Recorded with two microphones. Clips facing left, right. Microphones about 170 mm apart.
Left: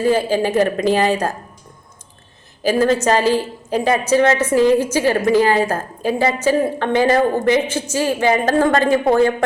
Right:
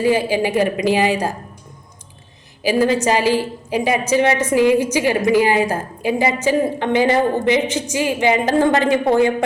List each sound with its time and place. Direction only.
0.0 s a woman's voice: 15° right (ahead or behind)
2.6 s a woman's voice: 10° right (ahead or behind)